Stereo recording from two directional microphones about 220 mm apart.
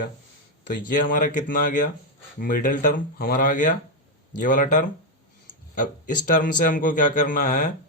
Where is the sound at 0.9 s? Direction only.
35° left (ahead or behind).